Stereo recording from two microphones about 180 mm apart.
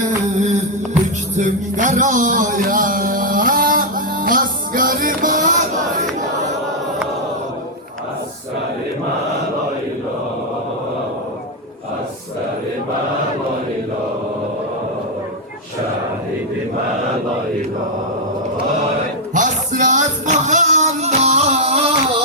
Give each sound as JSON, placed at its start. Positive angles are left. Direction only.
{"t": 1.0, "sound": "music", "side_deg": -45}
{"t": 19.3, "sound": "music", "side_deg": -45}